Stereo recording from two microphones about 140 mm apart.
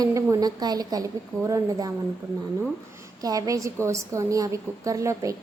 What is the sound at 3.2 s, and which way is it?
A woman's voice, 25° right (ahead or behind).